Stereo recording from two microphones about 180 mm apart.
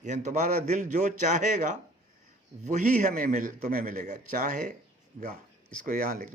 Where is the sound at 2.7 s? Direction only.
45° right (ahead or behind).